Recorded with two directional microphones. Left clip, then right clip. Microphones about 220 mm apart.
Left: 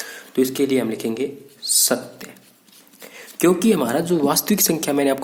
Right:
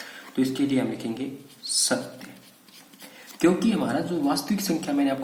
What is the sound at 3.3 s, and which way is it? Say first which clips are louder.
Speech: left 6 dB; 50° left (ahead or behind).